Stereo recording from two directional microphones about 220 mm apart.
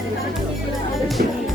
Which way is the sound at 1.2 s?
40° right (ahead or behind).